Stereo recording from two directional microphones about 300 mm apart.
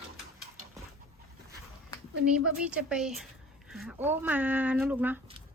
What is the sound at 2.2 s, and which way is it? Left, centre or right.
A woman's voice, centre.